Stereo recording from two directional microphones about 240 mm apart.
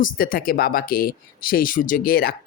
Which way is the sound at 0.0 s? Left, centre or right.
Left.